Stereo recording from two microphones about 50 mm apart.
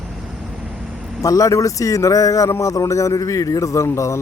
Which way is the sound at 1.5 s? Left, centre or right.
Left.